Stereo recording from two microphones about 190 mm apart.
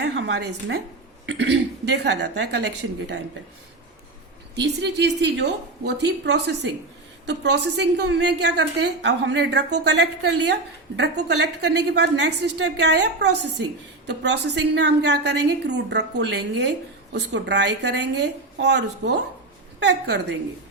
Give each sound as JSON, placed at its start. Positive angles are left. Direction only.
{"t": 0.0, "sound": "a woman's voice", "side_deg": -65}
{"t": 4.5, "sound": "a woman's voice", "side_deg": -60}